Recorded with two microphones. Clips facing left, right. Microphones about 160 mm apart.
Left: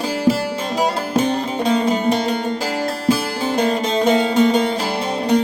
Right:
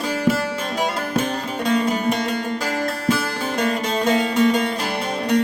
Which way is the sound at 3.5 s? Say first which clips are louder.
Left 4 dB; 30° left (ahead or behind).